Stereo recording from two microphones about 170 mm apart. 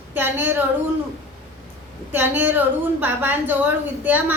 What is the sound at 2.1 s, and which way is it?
A woman's voice, 10° right (ahead or behind).